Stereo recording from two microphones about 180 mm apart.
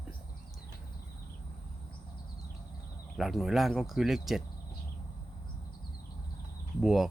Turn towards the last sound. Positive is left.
turn(degrees=-5)  # may be behind; listen again after turning